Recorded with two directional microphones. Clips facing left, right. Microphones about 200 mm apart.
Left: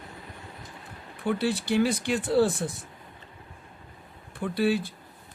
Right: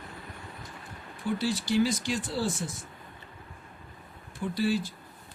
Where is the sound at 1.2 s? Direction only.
60° left (ahead or behind).